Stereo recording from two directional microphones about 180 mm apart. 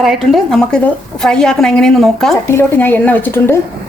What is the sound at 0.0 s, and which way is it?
A woman's voice, centre (ahead or behind).